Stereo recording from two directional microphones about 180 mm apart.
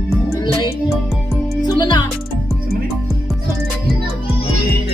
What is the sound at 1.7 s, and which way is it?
Music, 25° left (ahead or behind).